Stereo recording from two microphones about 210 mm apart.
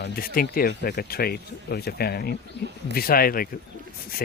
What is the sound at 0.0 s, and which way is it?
Speech, 45° left (ahead or behind).